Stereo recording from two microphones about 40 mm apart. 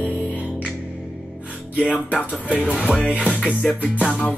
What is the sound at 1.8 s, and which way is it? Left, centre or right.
Music, left.